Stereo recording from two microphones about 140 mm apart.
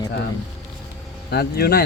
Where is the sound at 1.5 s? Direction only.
90° left.